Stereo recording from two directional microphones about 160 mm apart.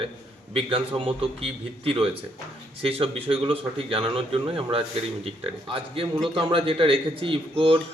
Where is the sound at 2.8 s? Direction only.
35° right (ahead or behind).